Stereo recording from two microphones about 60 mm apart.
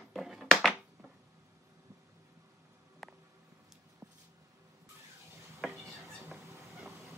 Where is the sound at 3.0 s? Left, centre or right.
Centre.